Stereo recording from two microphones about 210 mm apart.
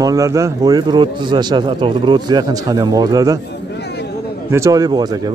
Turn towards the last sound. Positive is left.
turn(degrees=-20)  # may be behind; listen again after turning